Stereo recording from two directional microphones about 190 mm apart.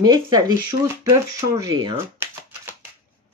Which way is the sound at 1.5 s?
20° right (ahead or behind).